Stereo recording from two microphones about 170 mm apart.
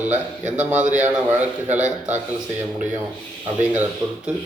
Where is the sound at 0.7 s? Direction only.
45° right (ahead or behind).